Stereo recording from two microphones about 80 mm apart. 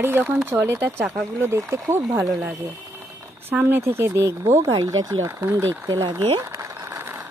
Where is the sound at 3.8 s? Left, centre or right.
Right.